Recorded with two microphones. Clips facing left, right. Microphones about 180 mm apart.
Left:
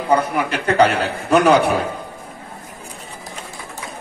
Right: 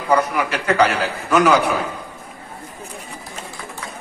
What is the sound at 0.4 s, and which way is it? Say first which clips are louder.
A man's voice: left 2 dB; 55° left (ahead or behind).